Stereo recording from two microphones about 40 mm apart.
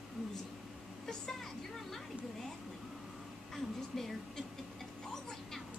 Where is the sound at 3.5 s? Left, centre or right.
Centre.